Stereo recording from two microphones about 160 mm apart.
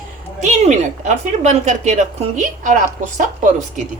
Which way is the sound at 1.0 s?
50° right (ahead or behind).